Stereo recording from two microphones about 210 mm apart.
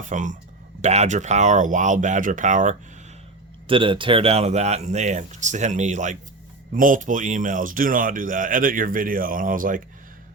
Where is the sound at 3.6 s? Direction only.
25° right (ahead or behind).